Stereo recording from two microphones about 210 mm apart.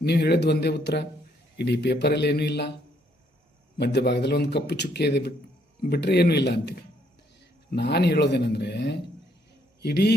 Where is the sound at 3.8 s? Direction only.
55° left (ahead or behind).